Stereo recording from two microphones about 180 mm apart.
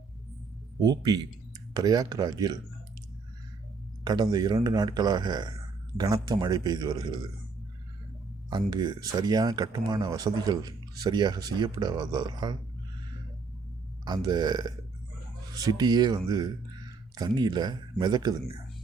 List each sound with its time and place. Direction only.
0.8 s speech: 20° right (ahead or behind)
4.0 s speech: 25° right (ahead or behind)
8.4 s speech: 25° right (ahead or behind)
14.0 s speech: 20° right (ahead or behind)